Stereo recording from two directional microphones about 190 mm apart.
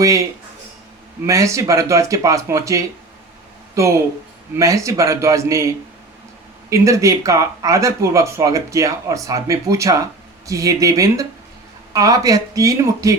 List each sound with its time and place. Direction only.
0.0 s speech: 15° right (ahead or behind)
1.3 s speech: 15° right (ahead or behind)